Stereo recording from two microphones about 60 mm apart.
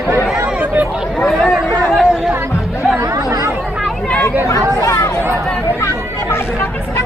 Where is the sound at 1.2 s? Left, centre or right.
Centre.